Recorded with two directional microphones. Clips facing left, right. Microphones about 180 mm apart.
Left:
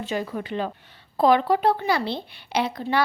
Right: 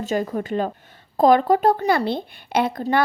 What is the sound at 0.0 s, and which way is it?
A woman's voice, 45° right (ahead or behind).